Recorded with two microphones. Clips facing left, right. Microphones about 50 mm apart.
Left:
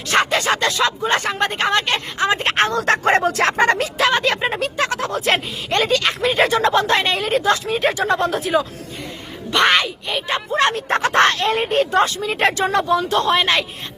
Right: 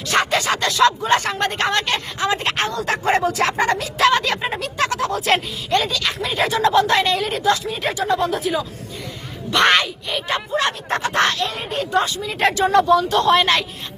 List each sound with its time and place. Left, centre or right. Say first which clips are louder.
0.1 s a sound: left 1 dB; left
0.9 s speech: right 2 dB; left
4.1 s speech: left 1 dB; left
9.6 s speech: even; centre
9.8 s speech: left 1 dB; left
10.6 s speech: left 4 dB; left
12.7 s speech: right 3 dB; centre
13.1 s speech: right 1 dB; left
13.3 s speech: right 2 dB; centre